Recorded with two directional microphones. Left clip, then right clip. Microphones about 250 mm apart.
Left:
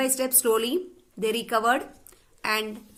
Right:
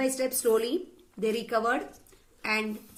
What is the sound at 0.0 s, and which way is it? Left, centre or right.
A woman's voice, left.